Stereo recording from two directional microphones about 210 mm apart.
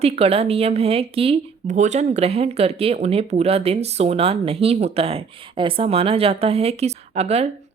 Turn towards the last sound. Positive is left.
turn(degrees=-30)  # may be behind; listen again after turning